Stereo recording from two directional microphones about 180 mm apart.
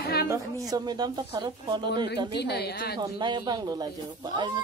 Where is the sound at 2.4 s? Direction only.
65° left (ahead or behind).